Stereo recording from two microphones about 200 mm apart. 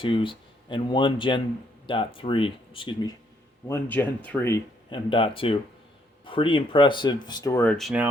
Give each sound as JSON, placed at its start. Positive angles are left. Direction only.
{"t": 0.0, "sound": "speech", "side_deg": 25}
{"t": 3.7, "sound": "speech", "side_deg": 10}
{"t": 4.9, "sound": "speech", "side_deg": 25}